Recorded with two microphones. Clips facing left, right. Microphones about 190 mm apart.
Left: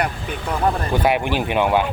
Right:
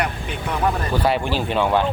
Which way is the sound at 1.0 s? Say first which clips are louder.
Left 2 dB; 15° left (ahead or behind).